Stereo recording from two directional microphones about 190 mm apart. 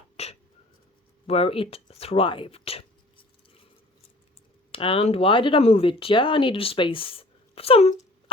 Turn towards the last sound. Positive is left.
turn(degrees=30)  # may be behind; listen again after turning